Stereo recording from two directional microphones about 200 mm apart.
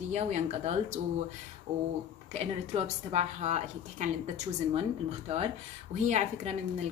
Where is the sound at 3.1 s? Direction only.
35° right (ahead or behind).